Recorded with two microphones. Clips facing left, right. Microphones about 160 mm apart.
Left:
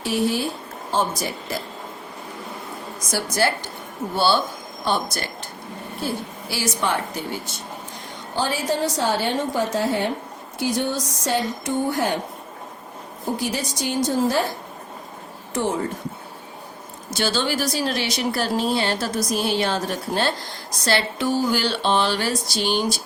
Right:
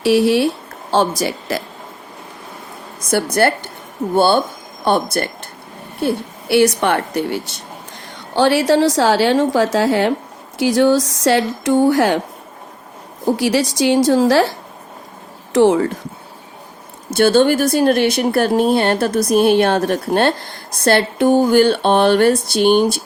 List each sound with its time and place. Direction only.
0.0 s speech: 75° right (ahead or behind)
3.1 s a woman's voice: 60° right (ahead or behind); by 12.2 s 90° right
13.2 s a woman's voice: 90° right
15.5 s speech: 90° right
17.2 s speech: 55° right (ahead or behind)